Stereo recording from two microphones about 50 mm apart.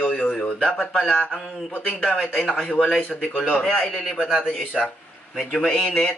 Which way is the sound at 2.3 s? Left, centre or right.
Centre.